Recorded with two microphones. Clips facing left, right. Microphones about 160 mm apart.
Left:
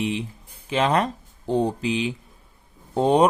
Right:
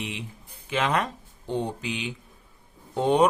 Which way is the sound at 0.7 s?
35° left (ahead or behind).